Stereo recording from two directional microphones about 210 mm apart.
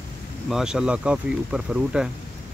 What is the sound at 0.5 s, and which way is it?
Speech, 5° right (ahead or behind).